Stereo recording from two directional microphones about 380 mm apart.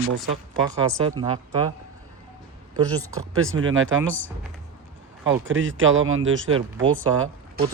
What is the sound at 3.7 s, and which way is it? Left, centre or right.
Speech, right.